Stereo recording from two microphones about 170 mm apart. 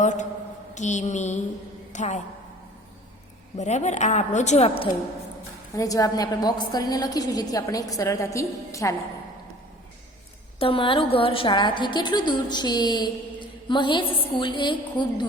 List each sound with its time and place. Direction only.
0.0 s mantra: 45° left (ahead or behind)
0.7 s a woman's voice: 45° left (ahead or behind)
3.6 s speech: 45° left (ahead or behind)
5.7 s a woman's voice: 20° left (ahead or behind)
10.6 s a woman's voice: 30° left (ahead or behind)